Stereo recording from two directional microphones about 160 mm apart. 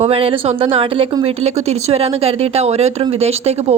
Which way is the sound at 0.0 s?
35° right (ahead or behind).